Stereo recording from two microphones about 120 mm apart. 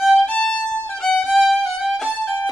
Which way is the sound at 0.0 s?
Centre (ahead or behind).